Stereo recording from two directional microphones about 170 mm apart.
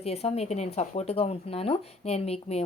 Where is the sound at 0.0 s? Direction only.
35° left (ahead or behind).